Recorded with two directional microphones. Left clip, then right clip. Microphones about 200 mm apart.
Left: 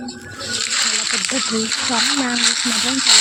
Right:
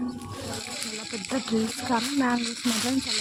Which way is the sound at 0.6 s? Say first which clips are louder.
Left 15 dB; 45° left (ahead or behind).